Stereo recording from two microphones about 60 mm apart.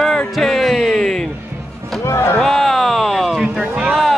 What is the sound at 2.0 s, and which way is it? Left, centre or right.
Music, left.